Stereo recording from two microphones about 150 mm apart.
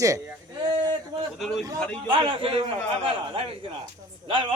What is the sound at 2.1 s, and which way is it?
Speech, 35° right (ahead or behind).